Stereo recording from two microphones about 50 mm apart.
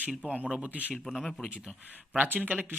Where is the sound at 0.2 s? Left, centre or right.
Right.